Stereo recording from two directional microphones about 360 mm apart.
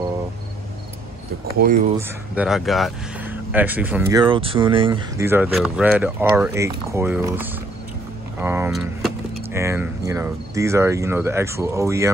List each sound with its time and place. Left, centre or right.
1.4 s speech: right
2.0 s speech: centre